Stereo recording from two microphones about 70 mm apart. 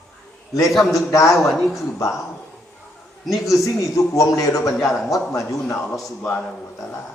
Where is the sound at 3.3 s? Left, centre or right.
Left.